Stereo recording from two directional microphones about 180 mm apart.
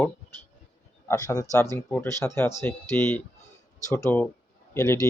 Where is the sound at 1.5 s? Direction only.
15° left (ahead or behind).